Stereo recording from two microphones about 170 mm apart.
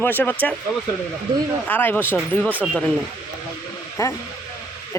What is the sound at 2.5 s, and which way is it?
Speech, 10° right (ahead or behind).